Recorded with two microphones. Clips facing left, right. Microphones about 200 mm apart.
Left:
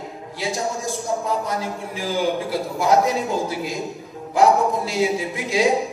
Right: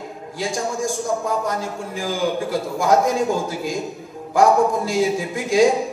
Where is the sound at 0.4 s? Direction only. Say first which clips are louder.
Right 2 dB; 50° right (ahead or behind).